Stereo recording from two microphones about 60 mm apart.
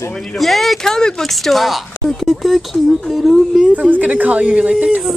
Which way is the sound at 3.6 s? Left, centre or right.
Right.